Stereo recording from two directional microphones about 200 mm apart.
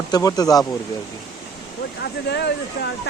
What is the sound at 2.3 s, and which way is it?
Speech, 60° left (ahead or behind).